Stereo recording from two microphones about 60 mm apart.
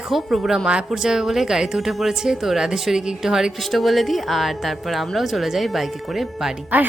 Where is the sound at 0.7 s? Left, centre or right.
Centre.